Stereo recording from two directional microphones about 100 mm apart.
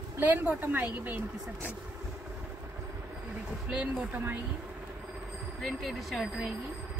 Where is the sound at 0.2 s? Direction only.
20° right (ahead or behind).